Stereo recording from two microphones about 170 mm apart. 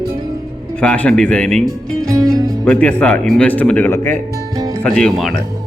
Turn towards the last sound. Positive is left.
turn(degrees=5)  # may be behind; listen again after turning